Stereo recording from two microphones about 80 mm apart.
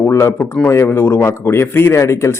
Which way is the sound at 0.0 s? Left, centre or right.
Left.